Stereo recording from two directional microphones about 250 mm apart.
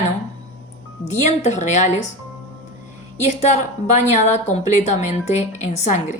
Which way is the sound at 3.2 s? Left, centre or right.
Left.